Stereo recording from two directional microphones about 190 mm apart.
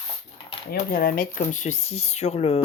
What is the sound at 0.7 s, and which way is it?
Speech, 50° left (ahead or behind).